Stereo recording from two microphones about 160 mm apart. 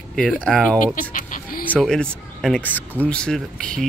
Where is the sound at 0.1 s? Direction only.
5° left (ahead or behind).